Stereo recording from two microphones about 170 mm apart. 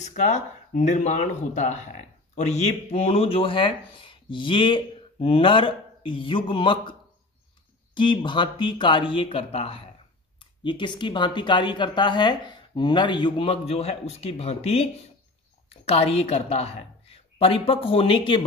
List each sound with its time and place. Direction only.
0.0 s a woman's voice: 45° left (ahead or behind)